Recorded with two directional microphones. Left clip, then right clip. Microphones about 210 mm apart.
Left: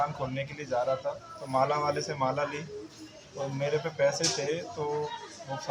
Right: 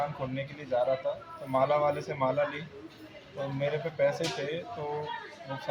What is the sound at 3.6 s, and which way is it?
Speech, 5° left (ahead or behind).